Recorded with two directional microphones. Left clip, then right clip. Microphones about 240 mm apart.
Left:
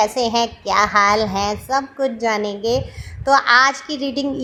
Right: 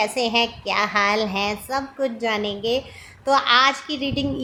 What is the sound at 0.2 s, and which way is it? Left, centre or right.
A woman's voice, centre.